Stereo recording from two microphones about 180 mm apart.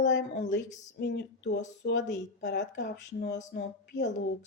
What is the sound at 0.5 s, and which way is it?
A woman's voice, 70° left (ahead or behind).